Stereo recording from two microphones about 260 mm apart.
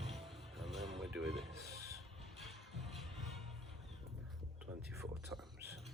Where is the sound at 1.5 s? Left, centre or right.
Centre.